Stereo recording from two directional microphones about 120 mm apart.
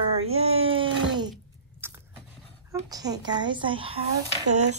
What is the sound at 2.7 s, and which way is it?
A woman's voice, 30° right (ahead or behind).